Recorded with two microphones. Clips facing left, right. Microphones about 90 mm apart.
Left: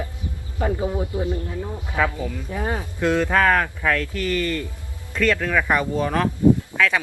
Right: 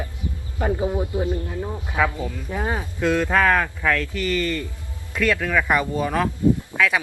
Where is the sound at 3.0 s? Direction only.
15° left (ahead or behind).